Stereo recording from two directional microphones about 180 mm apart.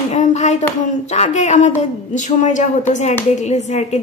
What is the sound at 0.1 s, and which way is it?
A woman's voice, 40° left (ahead or behind).